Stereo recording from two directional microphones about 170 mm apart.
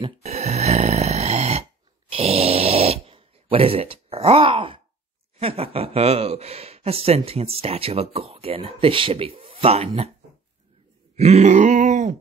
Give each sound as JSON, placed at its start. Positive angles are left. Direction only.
{"t": 0.0, "sound": "a sound", "side_deg": -40}
{"t": 5.4, "sound": "speech", "side_deg": -35}
{"t": 11.1, "sound": "grunt", "side_deg": -40}